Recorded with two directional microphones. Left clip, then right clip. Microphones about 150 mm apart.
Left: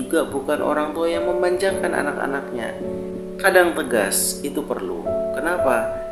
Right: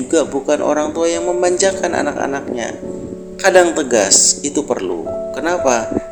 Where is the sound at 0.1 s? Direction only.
40° right (ahead or behind).